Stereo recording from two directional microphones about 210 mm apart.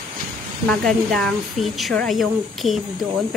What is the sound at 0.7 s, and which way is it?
Speech, 5° left (ahead or behind).